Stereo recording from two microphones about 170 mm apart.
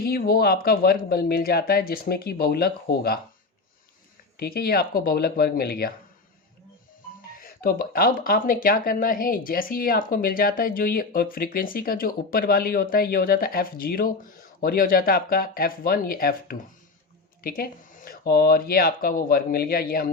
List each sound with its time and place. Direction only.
0.0 s speech: 60° left (ahead or behind)
4.4 s speech: 60° left (ahead or behind)
7.3 s speech: 60° left (ahead or behind)